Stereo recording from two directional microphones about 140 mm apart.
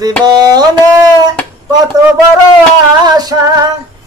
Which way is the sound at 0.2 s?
30° right (ahead or behind).